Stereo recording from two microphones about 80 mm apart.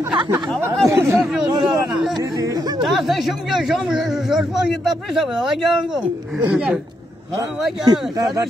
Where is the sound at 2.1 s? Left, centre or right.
Right.